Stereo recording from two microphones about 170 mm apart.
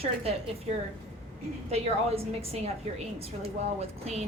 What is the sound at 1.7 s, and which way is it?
Speech, 35° right (ahead or behind).